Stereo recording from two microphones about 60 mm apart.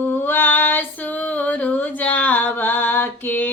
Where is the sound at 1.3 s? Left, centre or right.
Left.